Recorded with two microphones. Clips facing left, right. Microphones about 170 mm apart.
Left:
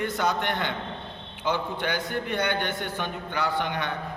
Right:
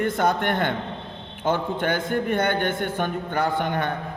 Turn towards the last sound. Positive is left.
turn(degrees=-50)  # may be behind; listen again after turning